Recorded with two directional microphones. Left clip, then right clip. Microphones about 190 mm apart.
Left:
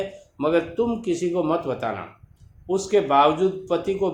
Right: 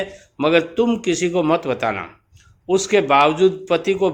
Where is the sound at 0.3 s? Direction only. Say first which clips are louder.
Right 5 dB; 45° right (ahead or behind).